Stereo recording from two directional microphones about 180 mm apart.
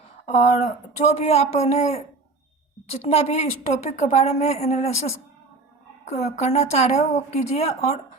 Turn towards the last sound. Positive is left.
turn(degrees=35)  # may be behind; listen again after turning